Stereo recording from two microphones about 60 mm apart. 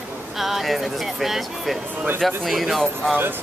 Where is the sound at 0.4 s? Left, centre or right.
Centre.